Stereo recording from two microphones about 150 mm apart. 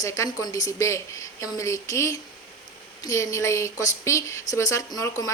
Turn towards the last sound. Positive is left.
turn(degrees=25)  # may be behind; listen again after turning